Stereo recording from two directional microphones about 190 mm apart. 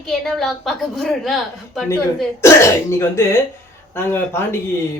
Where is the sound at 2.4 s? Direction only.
15° left (ahead or behind).